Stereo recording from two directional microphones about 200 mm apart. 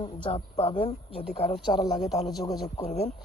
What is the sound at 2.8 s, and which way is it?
Speech, 30° left (ahead or behind).